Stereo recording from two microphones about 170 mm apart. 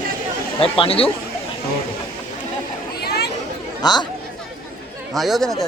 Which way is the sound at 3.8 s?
25° left (ahead or behind).